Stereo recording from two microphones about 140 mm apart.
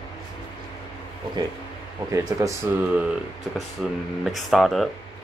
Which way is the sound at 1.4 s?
30° right (ahead or behind).